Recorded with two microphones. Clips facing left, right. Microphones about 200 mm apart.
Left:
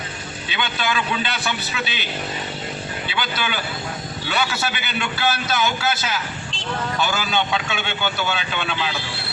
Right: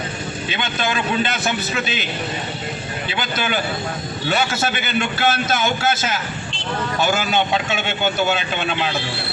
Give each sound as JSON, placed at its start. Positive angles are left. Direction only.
{"t": 0.5, "sound": "a man's voice", "side_deg": -45}
{"t": 3.2, "sound": "a man's voice", "side_deg": -45}